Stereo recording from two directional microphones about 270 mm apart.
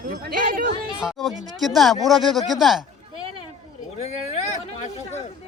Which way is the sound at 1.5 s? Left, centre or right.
Centre.